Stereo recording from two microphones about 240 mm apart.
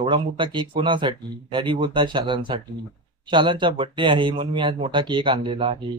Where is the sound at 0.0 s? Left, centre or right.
Right.